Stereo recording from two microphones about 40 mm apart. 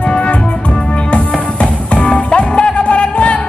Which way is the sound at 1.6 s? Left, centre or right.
Centre.